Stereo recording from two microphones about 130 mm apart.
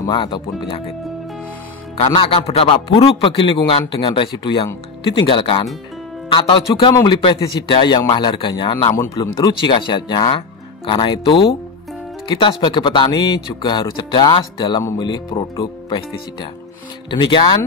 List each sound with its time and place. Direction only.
0.0 s speech: 35° left (ahead or behind)
2.1 s speech: 45° left (ahead or behind)
6.9 s speech: 25° left (ahead or behind)
7.4 s speech: 40° left (ahead or behind)